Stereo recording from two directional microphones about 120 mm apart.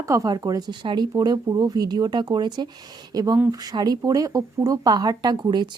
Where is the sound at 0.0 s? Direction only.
25° right (ahead or behind).